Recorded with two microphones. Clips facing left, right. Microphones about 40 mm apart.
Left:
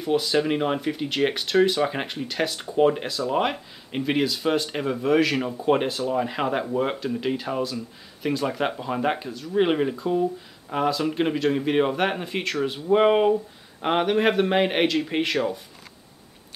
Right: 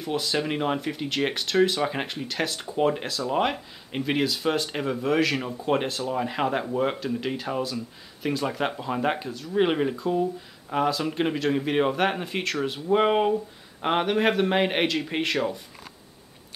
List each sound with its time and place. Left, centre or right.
0.0 s speech: centre